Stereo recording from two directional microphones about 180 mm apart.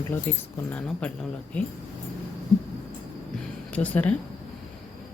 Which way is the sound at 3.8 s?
10° left (ahead or behind).